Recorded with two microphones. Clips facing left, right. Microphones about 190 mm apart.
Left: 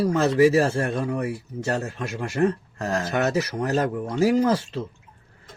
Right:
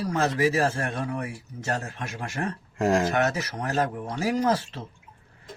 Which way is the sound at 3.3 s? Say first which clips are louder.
Left 6 dB; 30° left (ahead or behind).